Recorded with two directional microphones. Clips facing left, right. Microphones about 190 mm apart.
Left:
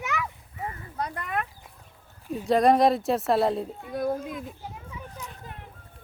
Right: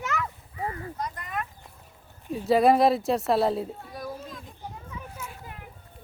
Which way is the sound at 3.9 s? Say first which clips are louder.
Left 13 dB; 55° left (ahead or behind).